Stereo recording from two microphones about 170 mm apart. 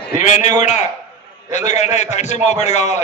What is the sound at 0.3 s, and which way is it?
A man's voice, 45° left (ahead or behind).